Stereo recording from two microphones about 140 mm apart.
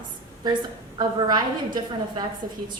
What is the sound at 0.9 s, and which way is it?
A woman's voice, 30° right (ahead or behind).